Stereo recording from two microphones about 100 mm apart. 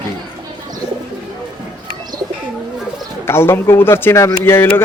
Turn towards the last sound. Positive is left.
turn(degrees=25)  # may be behind; listen again after turning